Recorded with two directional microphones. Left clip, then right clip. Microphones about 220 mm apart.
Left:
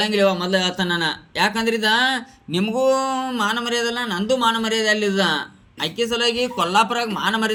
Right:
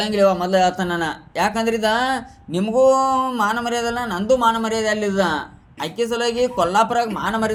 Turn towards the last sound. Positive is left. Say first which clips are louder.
# even
turn(degrees=35)  # may be behind; listen again after turning